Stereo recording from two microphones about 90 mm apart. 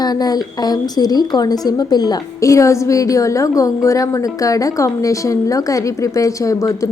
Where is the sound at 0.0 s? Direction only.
45° left (ahead or behind).